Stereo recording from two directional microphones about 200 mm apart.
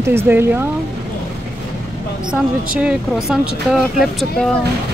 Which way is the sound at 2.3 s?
5° right (ahead or behind).